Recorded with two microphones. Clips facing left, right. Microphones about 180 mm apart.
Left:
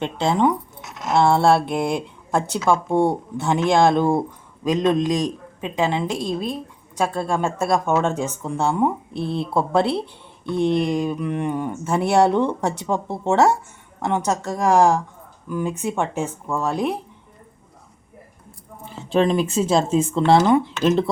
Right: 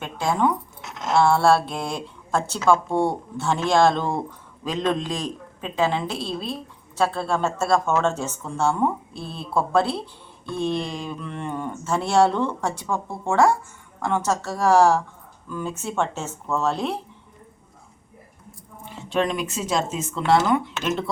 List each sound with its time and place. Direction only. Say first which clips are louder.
0.0 s speech: left 3 dB; 25° left (ahead or behind)
18.9 s speech: left 5 dB; 30° left (ahead or behind)